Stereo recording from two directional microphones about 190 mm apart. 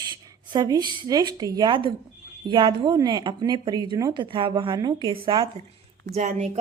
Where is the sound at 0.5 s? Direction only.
20° right (ahead or behind).